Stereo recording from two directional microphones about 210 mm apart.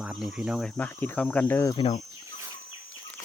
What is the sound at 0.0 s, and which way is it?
Speech, 5° right (ahead or behind).